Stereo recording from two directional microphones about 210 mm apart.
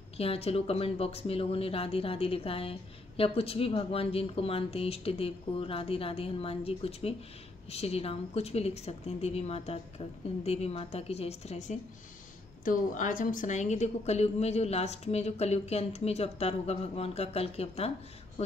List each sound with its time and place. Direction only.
0.2 s speech: 30° left (ahead or behind)